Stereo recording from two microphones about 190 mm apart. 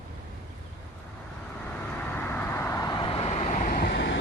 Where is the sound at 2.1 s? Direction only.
10° left (ahead or behind).